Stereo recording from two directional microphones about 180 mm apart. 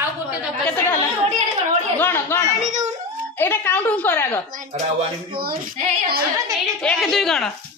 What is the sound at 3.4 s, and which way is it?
A woman's voice, 10° left (ahead or behind).